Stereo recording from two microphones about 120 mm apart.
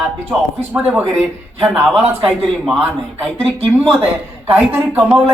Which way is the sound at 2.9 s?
55° right (ahead or behind).